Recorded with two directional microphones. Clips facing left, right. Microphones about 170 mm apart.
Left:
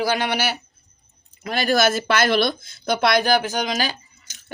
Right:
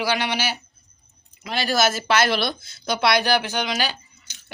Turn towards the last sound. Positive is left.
turn(degrees=40)  # may be behind; listen again after turning